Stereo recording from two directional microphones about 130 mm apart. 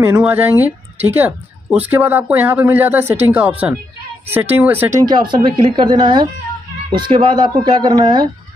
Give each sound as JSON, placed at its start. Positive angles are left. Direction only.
{"t": 0.0, "sound": "speech", "side_deg": -15}
{"t": 5.0, "sound": "speech", "side_deg": -35}